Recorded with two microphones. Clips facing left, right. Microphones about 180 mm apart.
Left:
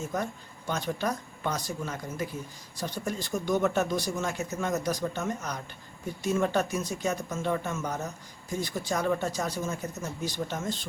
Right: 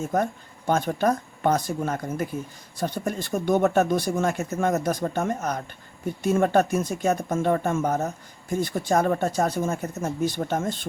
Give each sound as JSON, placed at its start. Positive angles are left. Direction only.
{"t": 0.1, "sound": "speech", "side_deg": -50}